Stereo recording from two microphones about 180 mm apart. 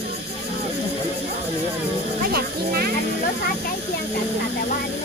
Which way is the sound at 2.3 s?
60° right (ahead or behind).